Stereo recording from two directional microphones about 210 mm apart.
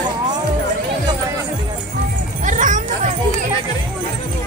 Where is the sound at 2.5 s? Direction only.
35° right (ahead or behind).